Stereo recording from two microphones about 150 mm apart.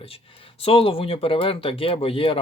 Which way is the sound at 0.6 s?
40° left (ahead or behind).